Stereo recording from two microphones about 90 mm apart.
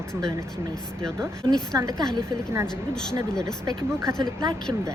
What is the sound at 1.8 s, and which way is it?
Speech, 40° right (ahead or behind).